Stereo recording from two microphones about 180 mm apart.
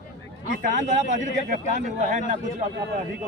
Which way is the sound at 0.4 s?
50° right (ahead or behind).